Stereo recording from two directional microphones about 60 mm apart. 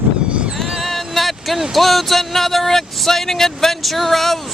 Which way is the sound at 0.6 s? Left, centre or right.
Centre.